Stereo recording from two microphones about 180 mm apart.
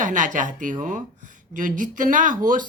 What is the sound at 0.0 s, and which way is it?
Speech, 45° right (ahead or behind).